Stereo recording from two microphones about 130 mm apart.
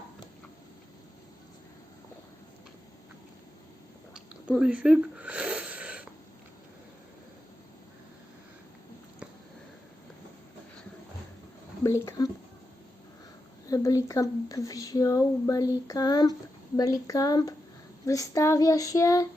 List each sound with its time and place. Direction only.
4.5 s wheeze: 5° right (ahead or behind)
11.8 s speech: 25° left (ahead or behind)
13.7 s speech: 25° left (ahead or behind)